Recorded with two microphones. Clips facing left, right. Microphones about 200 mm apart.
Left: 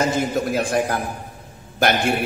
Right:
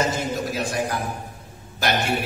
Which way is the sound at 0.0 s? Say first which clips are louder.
Left 4 dB; 55° left (ahead or behind).